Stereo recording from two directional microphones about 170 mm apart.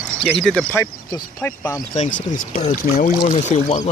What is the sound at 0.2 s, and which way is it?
Speech, centre (ahead or behind).